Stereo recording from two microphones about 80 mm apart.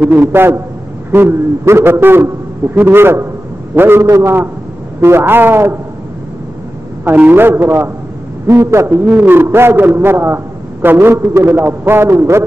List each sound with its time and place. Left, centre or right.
0.0 s a man's voice: right
7.2 s a man's voice: right
8.9 s a man's voice: centre; by 12.4 s right